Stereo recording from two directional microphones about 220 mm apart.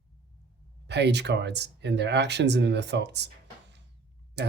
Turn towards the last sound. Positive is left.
turn(degrees=-50)  # may be behind; listen again after turning